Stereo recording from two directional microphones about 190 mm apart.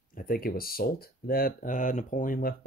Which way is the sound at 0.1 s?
50° left (ahead or behind).